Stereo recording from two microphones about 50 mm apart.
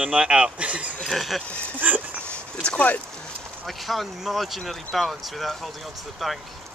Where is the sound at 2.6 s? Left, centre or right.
Left.